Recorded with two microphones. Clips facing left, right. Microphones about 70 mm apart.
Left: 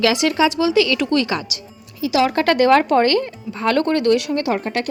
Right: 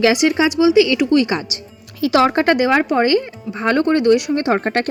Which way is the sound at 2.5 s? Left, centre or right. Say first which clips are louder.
Left 2 dB; centre.